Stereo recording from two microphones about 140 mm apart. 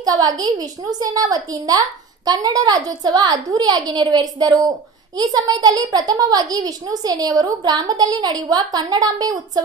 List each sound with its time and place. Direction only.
0.0 s a woman's voice: 25° right (ahead or behind)